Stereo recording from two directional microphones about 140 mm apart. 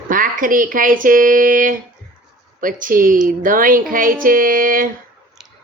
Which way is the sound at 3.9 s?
85° right.